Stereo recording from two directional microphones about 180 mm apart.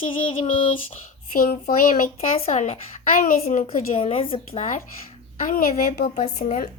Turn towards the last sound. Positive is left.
turn(degrees=50)  # may be behind; listen again after turning